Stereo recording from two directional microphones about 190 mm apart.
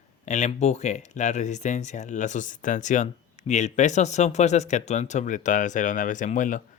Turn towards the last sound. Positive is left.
turn(degrees=45)  # may be behind; listen again after turning